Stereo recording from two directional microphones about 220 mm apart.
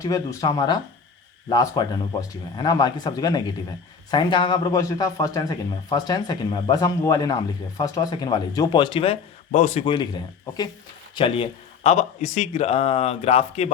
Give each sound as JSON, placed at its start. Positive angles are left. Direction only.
{"t": 0.0, "sound": "speech", "side_deg": 15}